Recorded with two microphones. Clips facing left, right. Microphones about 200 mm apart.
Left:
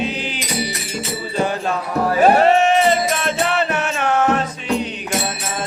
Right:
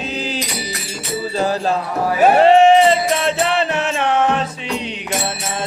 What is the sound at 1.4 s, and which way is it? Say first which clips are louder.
Music: right 2 dB; 35° right (ahead or behind).